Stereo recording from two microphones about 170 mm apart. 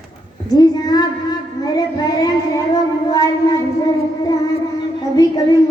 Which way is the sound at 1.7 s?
20° left (ahead or behind).